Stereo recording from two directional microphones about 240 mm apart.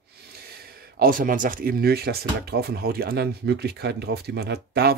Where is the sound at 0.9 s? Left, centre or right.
Right.